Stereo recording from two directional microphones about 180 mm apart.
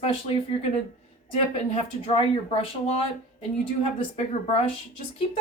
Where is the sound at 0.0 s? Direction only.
35° left (ahead or behind).